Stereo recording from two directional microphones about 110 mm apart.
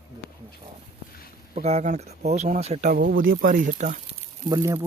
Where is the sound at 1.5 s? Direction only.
70° right (ahead or behind).